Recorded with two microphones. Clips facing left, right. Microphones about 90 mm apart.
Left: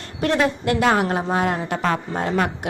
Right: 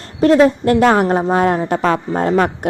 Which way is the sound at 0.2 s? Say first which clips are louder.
Right 9 dB; 35° right (ahead or behind).